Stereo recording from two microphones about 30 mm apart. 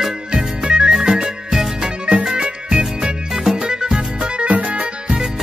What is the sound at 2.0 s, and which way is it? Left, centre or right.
Music, right.